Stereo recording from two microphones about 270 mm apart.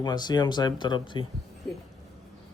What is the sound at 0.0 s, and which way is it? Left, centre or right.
Speech, centre.